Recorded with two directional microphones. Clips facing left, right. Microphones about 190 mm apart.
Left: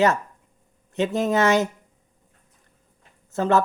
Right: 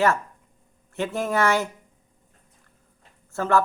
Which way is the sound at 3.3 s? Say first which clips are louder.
Left 2 dB; 20° left (ahead or behind).